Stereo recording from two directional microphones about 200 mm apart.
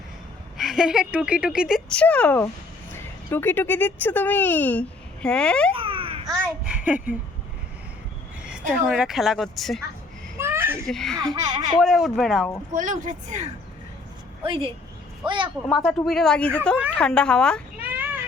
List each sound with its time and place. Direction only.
0.5 s speech: centre (ahead or behind)
5.7 s a sound: 25° right (ahead or behind)
6.2 s a child's voice: centre (ahead or behind)
8.4 s speech: 5° right (ahead or behind)
10.3 s a sound: 10° right (ahead or behind)
10.8 s speech: centre (ahead or behind)
12.7 s a woman's voice: 40° right (ahead or behind)
14.4 s speech: 25° right (ahead or behind)
15.7 s speech: centre (ahead or behind)
17.8 s children playing: 10° right (ahead or behind)